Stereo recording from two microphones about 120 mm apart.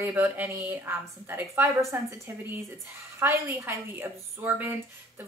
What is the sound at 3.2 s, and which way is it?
A woman's voice, 20° right (ahead or behind).